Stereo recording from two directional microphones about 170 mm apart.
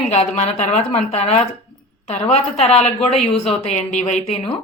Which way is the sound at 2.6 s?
40° left (ahead or behind).